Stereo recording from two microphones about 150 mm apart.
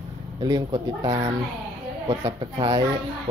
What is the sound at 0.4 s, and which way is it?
Speech, 30° right (ahead or behind).